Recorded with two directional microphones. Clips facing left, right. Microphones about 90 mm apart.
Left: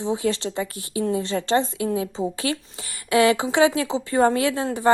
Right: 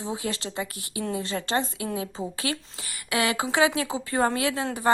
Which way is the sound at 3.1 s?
30° left (ahead or behind).